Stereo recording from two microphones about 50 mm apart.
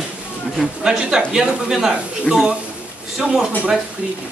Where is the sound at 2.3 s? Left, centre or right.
Left.